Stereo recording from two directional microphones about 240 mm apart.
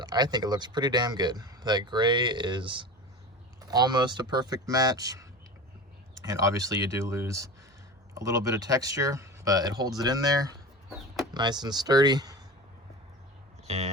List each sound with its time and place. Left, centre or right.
0.0 s speech: centre
6.2 s speech: centre
13.7 s speech: right